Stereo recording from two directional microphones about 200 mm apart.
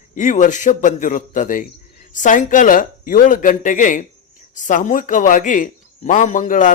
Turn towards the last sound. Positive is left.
turn(degrees=40)  # may be behind; listen again after turning